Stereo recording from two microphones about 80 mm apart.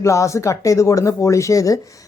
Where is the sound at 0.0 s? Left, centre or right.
Left.